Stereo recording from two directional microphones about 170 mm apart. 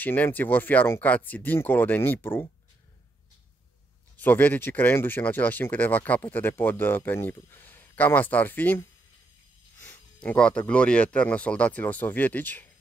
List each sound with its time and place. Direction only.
0.0 s speech: 10° left (ahead or behind)
4.2 s speech: 10° left (ahead or behind)